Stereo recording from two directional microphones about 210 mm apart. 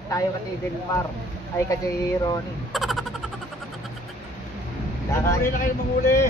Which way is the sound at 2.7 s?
Centre (ahead or behind).